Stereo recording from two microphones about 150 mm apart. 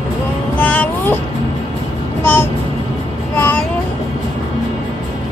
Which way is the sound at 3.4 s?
10° left (ahead or behind).